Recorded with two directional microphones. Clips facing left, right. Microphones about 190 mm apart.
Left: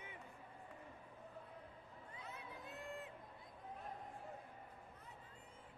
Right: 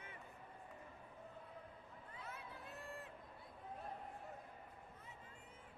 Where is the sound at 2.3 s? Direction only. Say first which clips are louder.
Left 1 dB; 20° left (ahead or behind).